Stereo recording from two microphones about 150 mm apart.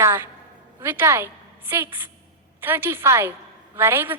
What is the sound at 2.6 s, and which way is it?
A woman's voice, 15° right (ahead or behind).